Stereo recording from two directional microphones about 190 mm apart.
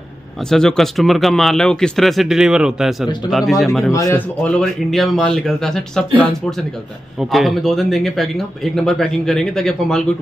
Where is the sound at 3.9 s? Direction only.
15° left (ahead or behind).